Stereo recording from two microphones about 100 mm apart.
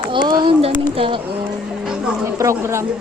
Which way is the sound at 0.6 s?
65° right (ahead or behind).